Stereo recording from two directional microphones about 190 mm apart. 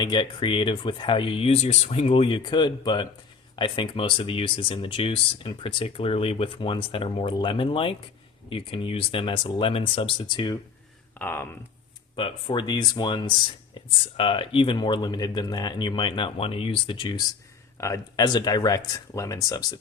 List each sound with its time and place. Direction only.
0.0 s speech: 25° left (ahead or behind)
11.2 s speech: 10° left (ahead or behind)
12.1 s speech: 25° left (ahead or behind)